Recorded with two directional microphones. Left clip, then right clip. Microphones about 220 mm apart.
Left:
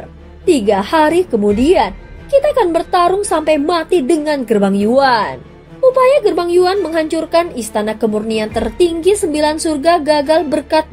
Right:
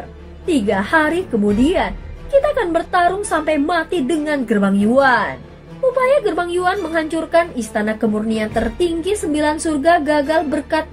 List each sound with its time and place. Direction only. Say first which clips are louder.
0.5 s a woman's voice: left 4 dB; 30° left (ahead or behind)